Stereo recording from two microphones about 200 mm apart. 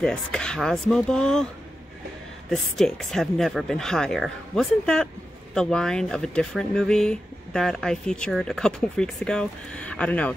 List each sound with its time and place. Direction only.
0.0 s speech: 5° left (ahead or behind)
2.5 s speech: 5° left (ahead or behind)